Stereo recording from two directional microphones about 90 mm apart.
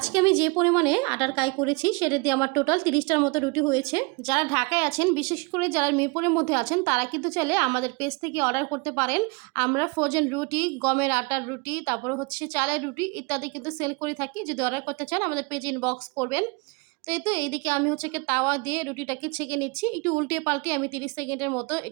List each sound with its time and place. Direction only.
0.0 s a woman's voice: 65° left (ahead or behind)
4.4 s a woman's voice: 40° left (ahead or behind); by 21.8 s 20° left (ahead or behind)